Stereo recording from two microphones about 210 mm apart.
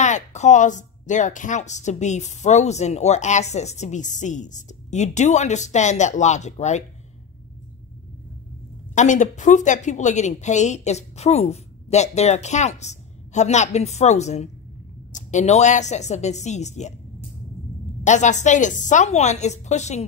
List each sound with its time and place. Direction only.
0.0 s speech: 35° left (ahead or behind)
8.9 s speech: 35° left (ahead or behind)
18.0 s speech: 35° left (ahead or behind)